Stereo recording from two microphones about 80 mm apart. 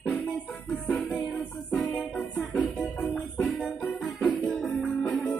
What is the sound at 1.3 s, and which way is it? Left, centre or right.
Music, centre.